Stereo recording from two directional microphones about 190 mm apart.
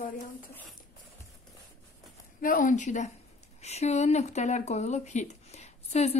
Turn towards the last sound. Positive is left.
turn(degrees=35)  # may be behind; listen again after turning